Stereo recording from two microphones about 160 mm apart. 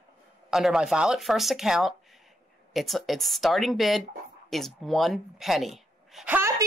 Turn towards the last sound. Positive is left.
turn(degrees=-15)  # may be behind; listen again after turning